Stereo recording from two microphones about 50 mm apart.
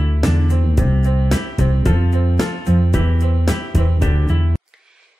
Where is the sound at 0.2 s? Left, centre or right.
Centre.